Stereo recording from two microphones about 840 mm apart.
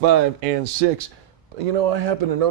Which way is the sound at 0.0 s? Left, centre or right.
Right.